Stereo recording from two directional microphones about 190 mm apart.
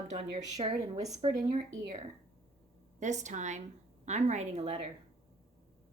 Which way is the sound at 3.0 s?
40° right (ahead or behind).